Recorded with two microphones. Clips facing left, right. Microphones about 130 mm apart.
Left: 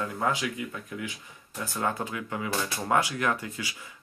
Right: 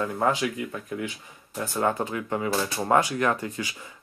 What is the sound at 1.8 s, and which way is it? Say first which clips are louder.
Speech: right 4 dB; 40° right (ahead or behind).